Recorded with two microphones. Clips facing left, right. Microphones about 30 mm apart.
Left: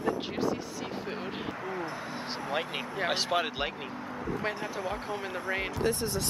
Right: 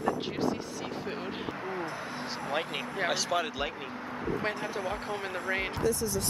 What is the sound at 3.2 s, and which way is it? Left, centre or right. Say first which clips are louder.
Speech: left 1 dB; left.